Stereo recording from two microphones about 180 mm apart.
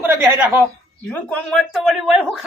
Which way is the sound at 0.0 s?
10° right (ahead or behind).